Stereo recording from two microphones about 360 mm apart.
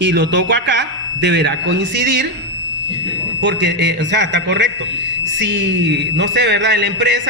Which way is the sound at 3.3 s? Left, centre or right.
Right.